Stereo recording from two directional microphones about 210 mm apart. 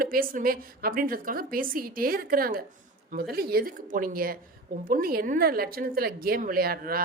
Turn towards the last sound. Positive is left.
turn(degrees=-45)  # may be behind; listen again after turning